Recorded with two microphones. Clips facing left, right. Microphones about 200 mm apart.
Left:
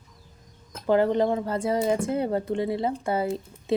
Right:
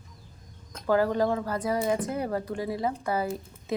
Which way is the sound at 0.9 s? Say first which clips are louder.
Left 3 dB; 25° left (ahead or behind).